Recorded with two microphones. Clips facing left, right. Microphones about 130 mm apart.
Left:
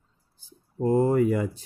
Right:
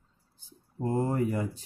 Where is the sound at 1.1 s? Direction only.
90° left.